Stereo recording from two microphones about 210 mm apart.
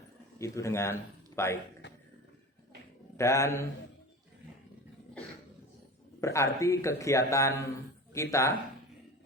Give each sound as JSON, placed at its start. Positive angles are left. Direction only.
{"t": 0.3, "sound": "a man's voice", "side_deg": 15}
{"t": 1.8, "sound": "a sound", "side_deg": 60}
{"t": 3.2, "sound": "a man's voice", "side_deg": 15}
{"t": 6.1, "sound": "a man's voice", "side_deg": 15}